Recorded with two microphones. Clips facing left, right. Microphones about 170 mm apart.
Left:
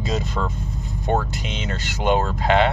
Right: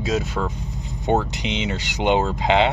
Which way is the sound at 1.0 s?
20° right (ahead or behind).